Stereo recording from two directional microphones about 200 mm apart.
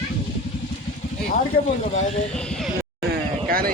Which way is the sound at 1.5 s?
50° left (ahead or behind).